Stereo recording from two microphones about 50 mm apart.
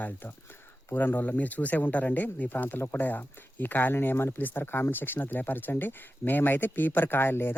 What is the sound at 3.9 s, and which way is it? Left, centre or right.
Speech, left.